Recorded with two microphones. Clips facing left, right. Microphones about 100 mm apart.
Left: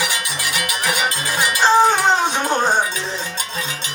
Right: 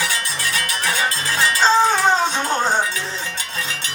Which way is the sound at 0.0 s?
15° left (ahead or behind).